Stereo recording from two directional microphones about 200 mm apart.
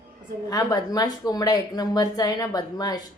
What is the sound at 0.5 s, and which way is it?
A woman's voice, 20° left (ahead or behind).